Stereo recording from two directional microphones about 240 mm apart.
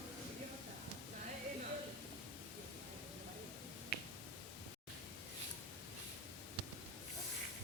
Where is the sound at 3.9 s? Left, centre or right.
Left.